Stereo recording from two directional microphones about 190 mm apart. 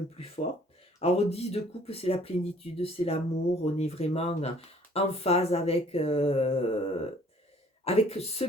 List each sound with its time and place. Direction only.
0.9 s speech: 30° left (ahead or behind)